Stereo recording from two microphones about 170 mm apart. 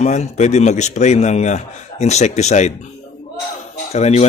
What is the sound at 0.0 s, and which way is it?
A man's voice, 45° left (ahead or behind).